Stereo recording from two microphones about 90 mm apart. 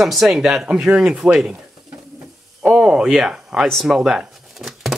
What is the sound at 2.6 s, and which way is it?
Speech, 5° right (ahead or behind).